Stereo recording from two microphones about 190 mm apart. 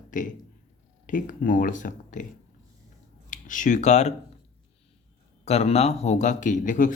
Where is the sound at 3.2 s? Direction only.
45° left (ahead or behind).